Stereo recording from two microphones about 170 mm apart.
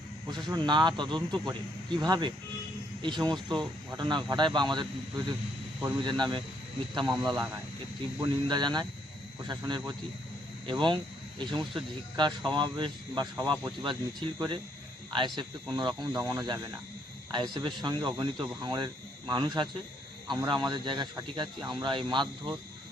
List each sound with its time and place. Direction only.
0.3 s speech: 25° right (ahead or behind)
15.7 s speech: 25° right (ahead or behind)